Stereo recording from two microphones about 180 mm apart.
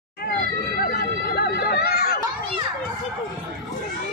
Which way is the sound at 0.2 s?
55° left (ahead or behind).